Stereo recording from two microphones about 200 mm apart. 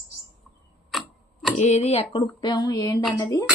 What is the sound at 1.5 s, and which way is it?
Speech, 35° left (ahead or behind).